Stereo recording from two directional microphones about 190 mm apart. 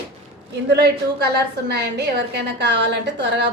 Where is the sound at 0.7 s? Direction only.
60° right (ahead or behind).